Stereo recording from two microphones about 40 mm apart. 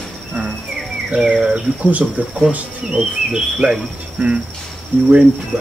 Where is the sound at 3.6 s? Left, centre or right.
Right.